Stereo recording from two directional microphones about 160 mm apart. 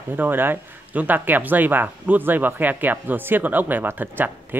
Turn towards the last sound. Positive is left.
turn(degrees=-10)  # may be behind; listen again after turning